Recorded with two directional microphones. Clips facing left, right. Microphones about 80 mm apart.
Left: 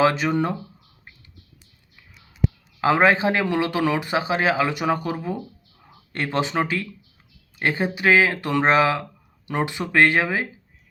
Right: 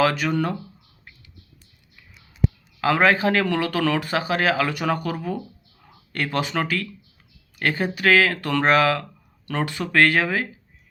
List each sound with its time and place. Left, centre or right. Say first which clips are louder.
0.0 s speech: left 1 dB; left
2.8 s speech: left 1 dB; left